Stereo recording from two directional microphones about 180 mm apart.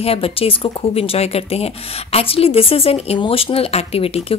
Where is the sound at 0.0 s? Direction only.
30° left (ahead or behind).